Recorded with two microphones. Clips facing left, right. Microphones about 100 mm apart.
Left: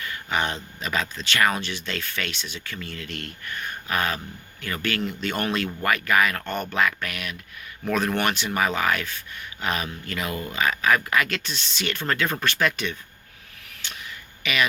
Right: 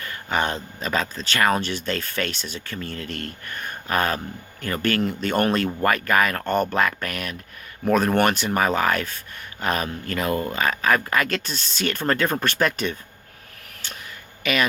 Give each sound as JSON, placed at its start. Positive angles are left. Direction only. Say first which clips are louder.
{"t": 0.0, "sound": "speech", "louder": "right 2 dB", "side_deg": -40}
{"t": 13.8, "sound": "a sound", "louder": "right 1 dB", "side_deg": -40}
{"t": 14.4, "sound": "speech", "louder": "right 2 dB", "side_deg": -40}